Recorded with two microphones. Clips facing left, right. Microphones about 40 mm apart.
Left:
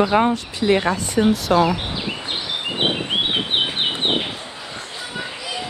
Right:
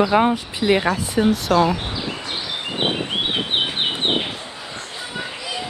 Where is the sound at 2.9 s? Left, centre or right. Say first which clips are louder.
Left 1 dB; centre.